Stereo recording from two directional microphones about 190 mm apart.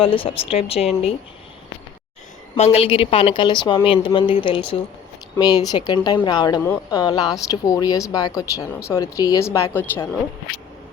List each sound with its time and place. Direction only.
0.0 s speech: 30° left (ahead or behind)
2.6 s speech: 35° left (ahead or behind); by 10.1 s 10° left (ahead or behind)